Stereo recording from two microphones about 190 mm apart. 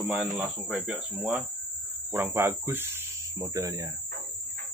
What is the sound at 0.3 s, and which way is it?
Speech, 5° right (ahead or behind).